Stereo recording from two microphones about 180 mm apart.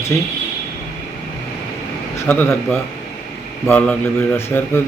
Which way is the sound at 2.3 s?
10° left (ahead or behind).